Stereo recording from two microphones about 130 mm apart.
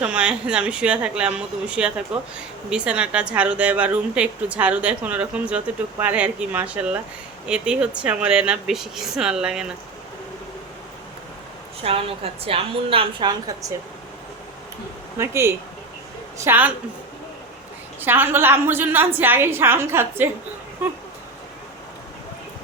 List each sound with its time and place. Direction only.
0.0 s a woman's voice: 10° right (ahead or behind)
11.8 s a woman's voice: 50° right (ahead or behind)
15.2 s a woman's voice: 20° right (ahead or behind)
18.0 s a woman's voice: 15° right (ahead or behind)